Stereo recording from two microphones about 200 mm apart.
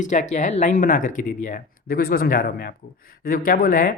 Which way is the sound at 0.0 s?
40° left (ahead or behind).